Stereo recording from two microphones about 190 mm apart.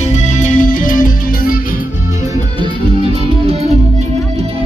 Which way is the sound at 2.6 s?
30° right (ahead or behind).